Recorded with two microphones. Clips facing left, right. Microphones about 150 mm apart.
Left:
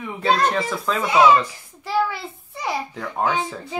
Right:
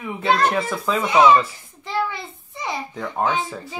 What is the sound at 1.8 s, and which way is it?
Speech, 10° left (ahead or behind).